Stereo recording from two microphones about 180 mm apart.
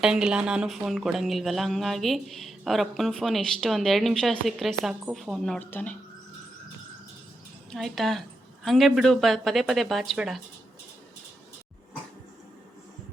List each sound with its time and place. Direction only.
0.0 s speech: 5° right (ahead or behind)
7.7 s speech: centre (ahead or behind)